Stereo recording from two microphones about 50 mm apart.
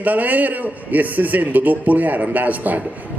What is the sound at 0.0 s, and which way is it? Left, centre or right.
A man's voice, right.